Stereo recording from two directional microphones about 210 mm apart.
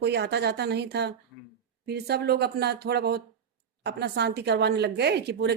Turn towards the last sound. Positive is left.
turn(degrees=-50)  # may be behind; listen again after turning